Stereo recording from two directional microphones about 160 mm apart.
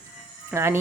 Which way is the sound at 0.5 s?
15° right (ahead or behind).